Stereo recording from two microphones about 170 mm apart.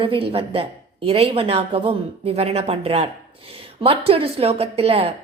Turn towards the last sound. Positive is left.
turn(degrees=-35)  # may be behind; listen again after turning